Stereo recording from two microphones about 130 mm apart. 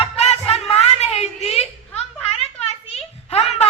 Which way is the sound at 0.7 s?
55° left (ahead or behind).